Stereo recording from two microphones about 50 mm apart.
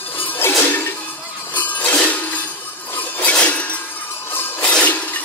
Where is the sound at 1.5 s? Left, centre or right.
Left.